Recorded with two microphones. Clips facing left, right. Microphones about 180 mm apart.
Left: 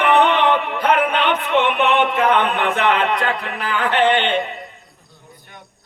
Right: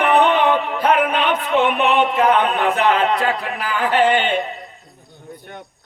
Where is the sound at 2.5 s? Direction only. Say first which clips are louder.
Right 1 dB; 35° right (ahead or behind).